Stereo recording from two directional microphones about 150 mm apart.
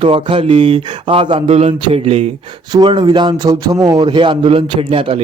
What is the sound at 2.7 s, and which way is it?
Speech, 30° right (ahead or behind).